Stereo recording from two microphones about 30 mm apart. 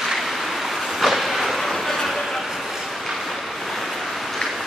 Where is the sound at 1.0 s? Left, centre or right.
Centre.